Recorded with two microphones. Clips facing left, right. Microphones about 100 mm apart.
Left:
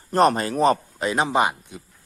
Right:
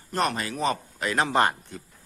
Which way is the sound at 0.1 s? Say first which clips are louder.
Left 8 dB; 40° left (ahead or behind).